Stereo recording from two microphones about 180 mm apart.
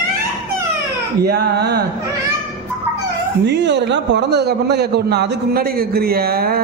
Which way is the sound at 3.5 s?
70° right (ahead or behind).